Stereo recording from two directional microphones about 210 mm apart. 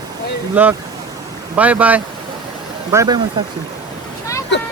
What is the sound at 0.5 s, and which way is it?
Speech, 10° right (ahead or behind).